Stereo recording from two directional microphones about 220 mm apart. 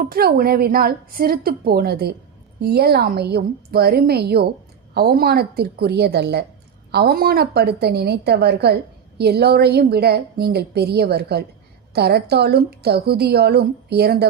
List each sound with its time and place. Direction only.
0.0 s a woman's voice: 45° right (ahead or behind)